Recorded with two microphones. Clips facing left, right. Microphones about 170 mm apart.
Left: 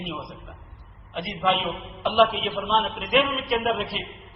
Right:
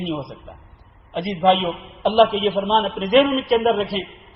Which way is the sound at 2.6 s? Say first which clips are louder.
Right 5 dB; 35° right (ahead or behind).